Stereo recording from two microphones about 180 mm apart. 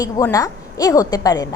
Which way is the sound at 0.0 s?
20° left (ahead or behind).